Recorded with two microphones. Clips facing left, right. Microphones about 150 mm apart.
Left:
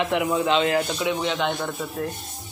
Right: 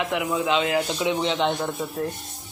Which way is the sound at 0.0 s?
Centre (ahead or behind).